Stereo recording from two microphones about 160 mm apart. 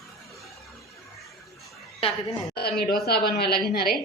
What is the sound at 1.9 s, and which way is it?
Speech, 35° left (ahead or behind).